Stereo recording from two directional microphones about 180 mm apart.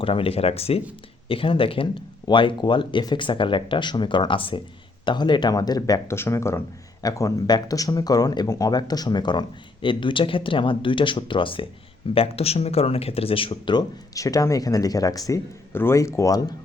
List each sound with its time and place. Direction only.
0.0 s speech: 30° left (ahead or behind)